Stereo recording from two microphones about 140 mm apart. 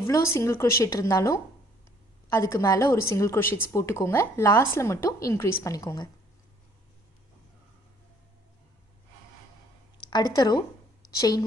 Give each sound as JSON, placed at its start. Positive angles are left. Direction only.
{"t": 0.0, "sound": "speech", "side_deg": 20}
{"t": 10.1, "sound": "speech", "side_deg": 25}